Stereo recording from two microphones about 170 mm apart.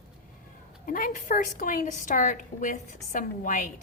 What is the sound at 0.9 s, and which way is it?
A woman's voice, 55° left (ahead or behind).